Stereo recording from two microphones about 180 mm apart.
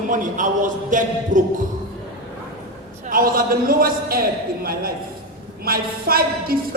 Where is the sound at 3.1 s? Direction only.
50° right (ahead or behind).